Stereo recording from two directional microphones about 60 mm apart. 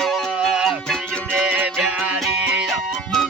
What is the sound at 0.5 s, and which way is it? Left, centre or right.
Music, centre.